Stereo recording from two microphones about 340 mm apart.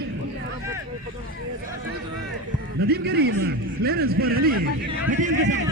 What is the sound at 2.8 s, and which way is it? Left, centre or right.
A man's voice, right.